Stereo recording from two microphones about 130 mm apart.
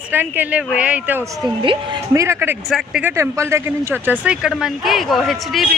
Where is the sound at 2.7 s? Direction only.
5° right (ahead or behind).